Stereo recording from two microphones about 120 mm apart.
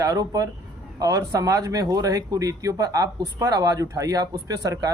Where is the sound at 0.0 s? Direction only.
35° right (ahead or behind).